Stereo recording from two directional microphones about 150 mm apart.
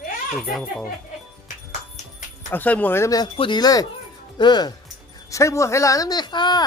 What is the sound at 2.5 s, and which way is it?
Speech, 10° left (ahead or behind).